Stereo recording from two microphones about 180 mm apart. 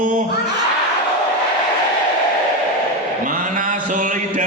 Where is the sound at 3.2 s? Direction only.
45° right (ahead or behind).